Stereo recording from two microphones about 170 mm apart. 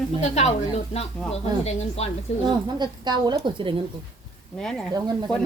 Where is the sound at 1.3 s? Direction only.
35° left (ahead or behind).